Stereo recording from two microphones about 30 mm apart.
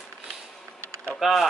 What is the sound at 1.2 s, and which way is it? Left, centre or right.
Speech, centre.